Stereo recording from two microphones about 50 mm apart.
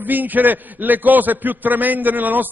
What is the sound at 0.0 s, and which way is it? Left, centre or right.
A man's voice, right.